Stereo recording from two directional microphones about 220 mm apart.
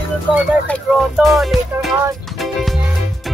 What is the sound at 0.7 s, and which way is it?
Speech, centre (ahead or behind).